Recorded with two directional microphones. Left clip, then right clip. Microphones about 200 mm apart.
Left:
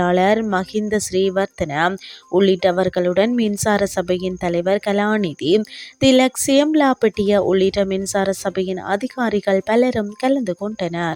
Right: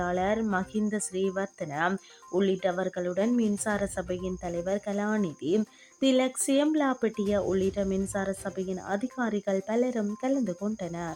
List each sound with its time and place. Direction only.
0.0 s speech: 40° left (ahead or behind)